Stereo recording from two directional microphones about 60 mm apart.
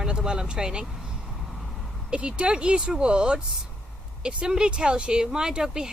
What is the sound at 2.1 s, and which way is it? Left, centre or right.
Speech, centre.